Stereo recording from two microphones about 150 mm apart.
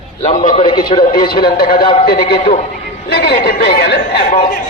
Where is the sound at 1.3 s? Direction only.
90° left.